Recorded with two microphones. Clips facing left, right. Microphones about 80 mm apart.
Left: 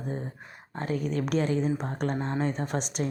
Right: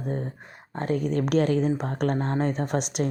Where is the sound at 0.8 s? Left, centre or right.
Right.